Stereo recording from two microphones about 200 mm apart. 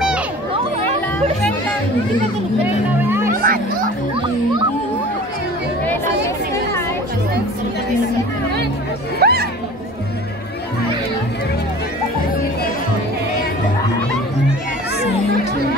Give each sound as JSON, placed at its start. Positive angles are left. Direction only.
{"t": 3.0, "sound": "speech", "side_deg": -10}
{"t": 3.3, "sound": "a child's voice", "side_deg": -45}
{"t": 9.2, "sound": "chatter", "side_deg": -50}